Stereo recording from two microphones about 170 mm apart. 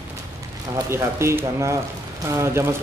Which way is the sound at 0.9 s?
15° right (ahead or behind).